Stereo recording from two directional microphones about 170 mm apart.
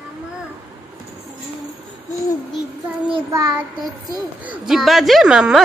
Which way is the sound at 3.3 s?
20° right (ahead or behind).